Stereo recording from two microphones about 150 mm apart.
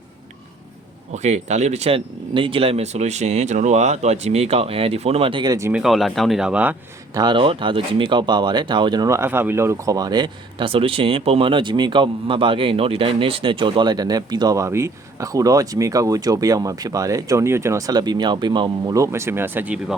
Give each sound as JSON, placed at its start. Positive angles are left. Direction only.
{"t": 1.1, "sound": "speech", "side_deg": -50}
{"t": 5.7, "sound": "speech", "side_deg": 0}
{"t": 7.1, "sound": "speech", "side_deg": -25}